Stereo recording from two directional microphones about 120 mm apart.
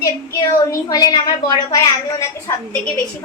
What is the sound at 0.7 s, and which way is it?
A woman's voice, 30° left (ahead or behind).